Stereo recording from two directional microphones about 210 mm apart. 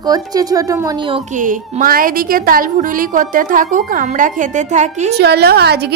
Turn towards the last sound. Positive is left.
turn(degrees=-50)  # may be behind; listen again after turning